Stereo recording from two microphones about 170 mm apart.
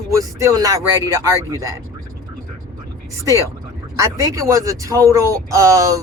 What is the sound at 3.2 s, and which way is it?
Speech, 20° right (ahead or behind).